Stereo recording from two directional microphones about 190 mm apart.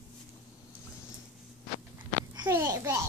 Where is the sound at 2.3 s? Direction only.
15° right (ahead or behind).